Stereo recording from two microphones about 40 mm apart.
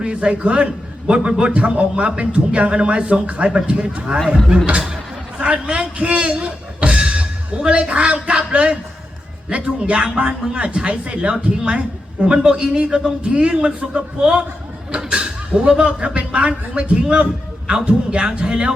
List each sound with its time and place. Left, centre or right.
0.0 s a man's voice: right